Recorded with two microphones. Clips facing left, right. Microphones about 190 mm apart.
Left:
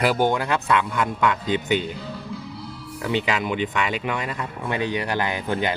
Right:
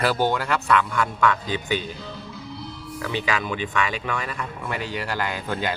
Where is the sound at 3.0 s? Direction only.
20° left (ahead or behind).